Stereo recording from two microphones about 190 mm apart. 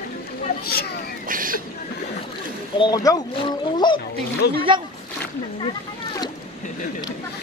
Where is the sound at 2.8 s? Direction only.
20° left (ahead or behind).